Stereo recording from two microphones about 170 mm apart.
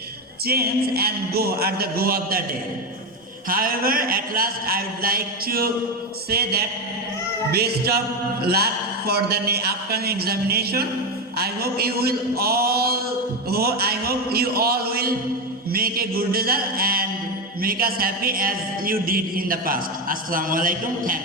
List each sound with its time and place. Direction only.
0.4 s a man's voice: 65° right (ahead or behind)
3.5 s a man's voice: 60° right (ahead or behind)